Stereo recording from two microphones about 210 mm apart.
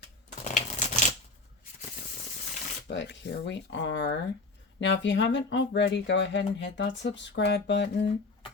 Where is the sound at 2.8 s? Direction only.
55° left (ahead or behind).